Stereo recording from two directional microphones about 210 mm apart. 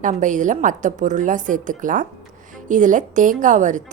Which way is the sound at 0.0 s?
35° right (ahead or behind).